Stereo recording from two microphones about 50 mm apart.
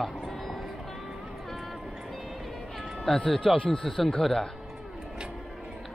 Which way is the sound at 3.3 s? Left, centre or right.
Left.